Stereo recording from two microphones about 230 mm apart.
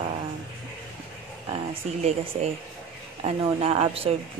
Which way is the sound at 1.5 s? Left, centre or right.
Right.